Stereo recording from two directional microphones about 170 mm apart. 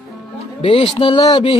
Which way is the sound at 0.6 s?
30° left (ahead or behind).